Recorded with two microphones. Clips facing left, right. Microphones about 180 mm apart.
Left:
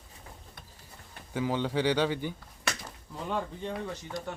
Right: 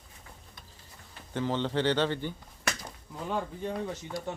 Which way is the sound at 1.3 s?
10° left (ahead or behind).